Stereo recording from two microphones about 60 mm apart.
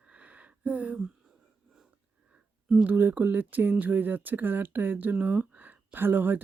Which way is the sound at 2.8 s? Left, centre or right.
Right.